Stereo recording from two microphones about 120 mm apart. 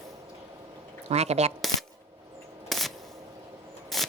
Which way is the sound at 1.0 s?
65° right (ahead or behind).